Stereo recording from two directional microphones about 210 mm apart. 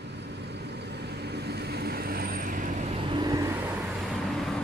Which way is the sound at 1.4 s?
50° right (ahead or behind).